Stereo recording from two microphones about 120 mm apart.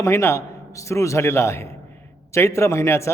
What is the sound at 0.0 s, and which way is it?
A man's voice, 20° left (ahead or behind).